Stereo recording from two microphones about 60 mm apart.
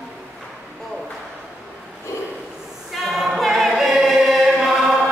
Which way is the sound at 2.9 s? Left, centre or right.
Centre.